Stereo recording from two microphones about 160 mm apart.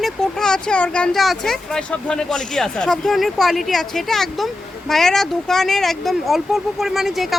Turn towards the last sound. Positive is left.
turn(degrees=0)  # may be behind; listen again after turning